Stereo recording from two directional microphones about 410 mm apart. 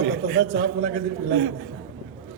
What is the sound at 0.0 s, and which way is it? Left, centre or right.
A man's voice, right.